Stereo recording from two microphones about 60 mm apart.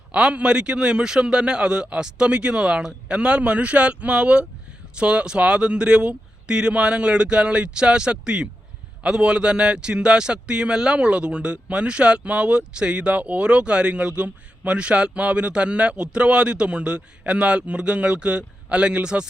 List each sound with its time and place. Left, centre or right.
0.1 s a man's voice: centre